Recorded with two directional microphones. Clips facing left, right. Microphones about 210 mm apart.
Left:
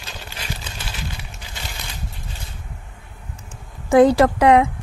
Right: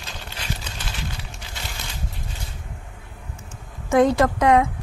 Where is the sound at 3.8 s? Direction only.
30° left (ahead or behind).